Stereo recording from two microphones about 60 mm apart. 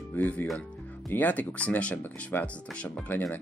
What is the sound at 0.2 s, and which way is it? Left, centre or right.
Speech, left.